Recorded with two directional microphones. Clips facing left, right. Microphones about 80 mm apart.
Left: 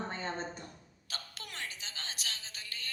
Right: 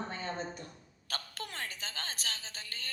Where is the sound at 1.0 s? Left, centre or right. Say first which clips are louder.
Right 5 dB; right.